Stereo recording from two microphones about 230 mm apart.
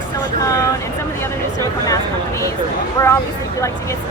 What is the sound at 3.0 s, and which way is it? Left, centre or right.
Speech, centre.